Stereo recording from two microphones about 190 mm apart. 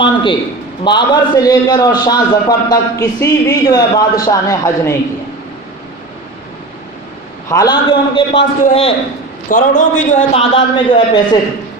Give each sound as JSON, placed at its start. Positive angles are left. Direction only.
{"t": 0.0, "sound": "a sound", "side_deg": 25}
{"t": 0.9, "sound": "a man's voice", "side_deg": 25}
{"t": 7.4, "sound": "a man's voice", "side_deg": 20}
{"t": 9.5, "sound": "a man's voice", "side_deg": 45}